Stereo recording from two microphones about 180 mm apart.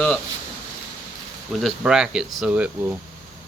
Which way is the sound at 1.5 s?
Centre (ahead or behind).